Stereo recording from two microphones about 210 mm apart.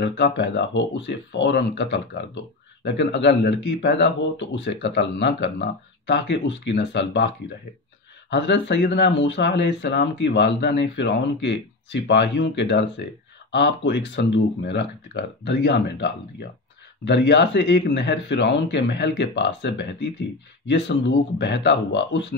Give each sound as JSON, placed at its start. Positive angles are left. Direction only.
{"t": 0.0, "sound": "speech", "side_deg": 55}